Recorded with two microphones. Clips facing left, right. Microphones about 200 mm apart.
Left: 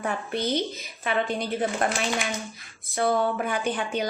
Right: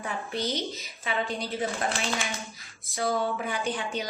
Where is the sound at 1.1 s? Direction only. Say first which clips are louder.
Left 4 dB; 60° left (ahead or behind).